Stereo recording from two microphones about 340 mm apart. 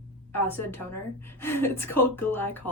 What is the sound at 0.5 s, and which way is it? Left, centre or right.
A woman's voice, centre.